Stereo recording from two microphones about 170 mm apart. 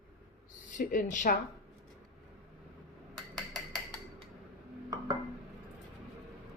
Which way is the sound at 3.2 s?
Centre (ahead or behind).